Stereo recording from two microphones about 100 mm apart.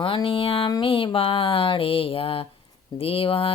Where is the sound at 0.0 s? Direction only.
60° left (ahead or behind).